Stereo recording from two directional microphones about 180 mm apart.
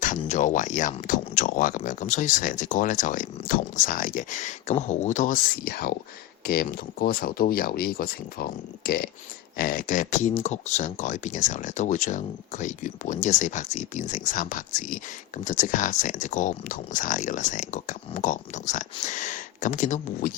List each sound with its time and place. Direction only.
0.2 s speech: 40° left (ahead or behind)